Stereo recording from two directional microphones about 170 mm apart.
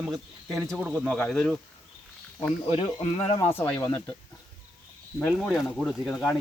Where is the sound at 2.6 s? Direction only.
35° left (ahead or behind).